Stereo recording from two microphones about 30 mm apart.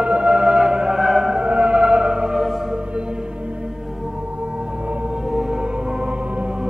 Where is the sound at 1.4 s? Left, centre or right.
Right.